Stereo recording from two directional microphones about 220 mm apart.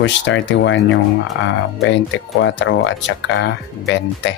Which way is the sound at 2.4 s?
55° left (ahead or behind).